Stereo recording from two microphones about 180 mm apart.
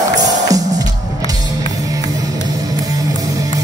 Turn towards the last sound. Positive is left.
turn(degrees=-20)  # may be behind; listen again after turning